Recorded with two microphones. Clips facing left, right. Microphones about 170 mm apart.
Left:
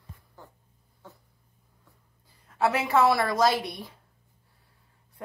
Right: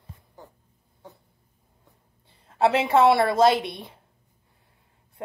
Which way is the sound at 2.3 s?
25° right (ahead or behind).